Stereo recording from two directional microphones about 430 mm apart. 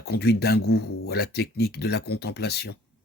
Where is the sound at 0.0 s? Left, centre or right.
Left.